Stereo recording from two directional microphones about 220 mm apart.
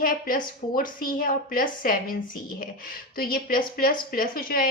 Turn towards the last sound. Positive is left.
turn(degrees=40)  # may be behind; listen again after turning